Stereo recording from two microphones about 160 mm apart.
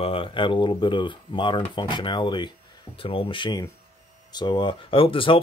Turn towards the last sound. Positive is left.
turn(degrees=35)  # may be behind; listen again after turning